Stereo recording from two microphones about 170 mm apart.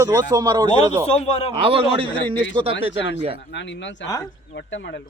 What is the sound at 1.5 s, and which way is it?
Speech, 30° right (ahead or behind).